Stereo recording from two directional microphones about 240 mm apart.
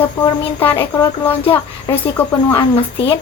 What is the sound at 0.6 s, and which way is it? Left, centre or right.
Speech, centre.